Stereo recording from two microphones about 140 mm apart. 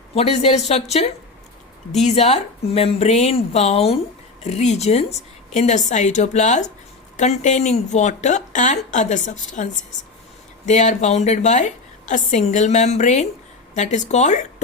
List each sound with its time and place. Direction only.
0.1 s a woman's voice: 45° left (ahead or behind)
10.7 s a woman's voice: 60° left (ahead or behind)